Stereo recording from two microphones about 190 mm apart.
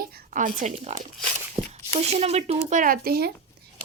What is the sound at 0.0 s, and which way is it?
A woman's voice, 45° right (ahead or behind).